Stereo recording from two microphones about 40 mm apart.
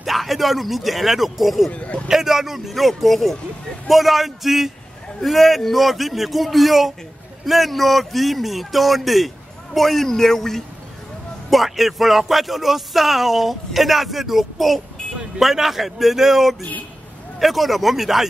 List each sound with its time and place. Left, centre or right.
0.0 s speech: centre
1.7 s speech: left
2.0 s speech: centre